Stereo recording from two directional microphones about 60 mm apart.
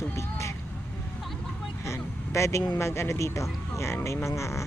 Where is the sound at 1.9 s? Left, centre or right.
Left.